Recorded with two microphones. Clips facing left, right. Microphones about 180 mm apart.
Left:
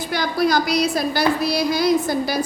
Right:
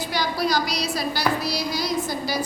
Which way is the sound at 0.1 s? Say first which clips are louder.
Left 5 dB; 55° left (ahead or behind).